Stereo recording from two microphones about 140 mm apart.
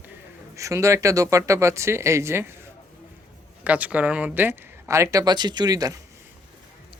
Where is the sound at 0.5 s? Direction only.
20° right (ahead or behind).